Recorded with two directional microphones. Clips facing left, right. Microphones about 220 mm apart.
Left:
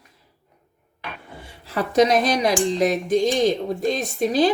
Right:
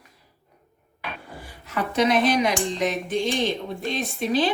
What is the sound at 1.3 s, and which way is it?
Speech, 30° left (ahead or behind).